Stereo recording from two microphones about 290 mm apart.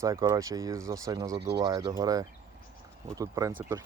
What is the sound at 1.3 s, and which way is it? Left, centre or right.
Speech, right.